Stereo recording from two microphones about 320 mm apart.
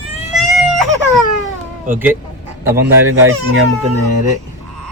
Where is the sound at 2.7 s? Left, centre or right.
Centre.